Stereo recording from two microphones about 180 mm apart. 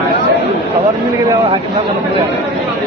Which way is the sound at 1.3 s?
25° right (ahead or behind).